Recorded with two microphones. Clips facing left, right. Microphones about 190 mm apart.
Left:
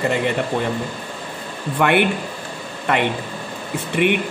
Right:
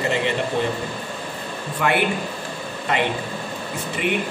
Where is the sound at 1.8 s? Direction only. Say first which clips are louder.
Left 4 dB; 60° left (ahead or behind).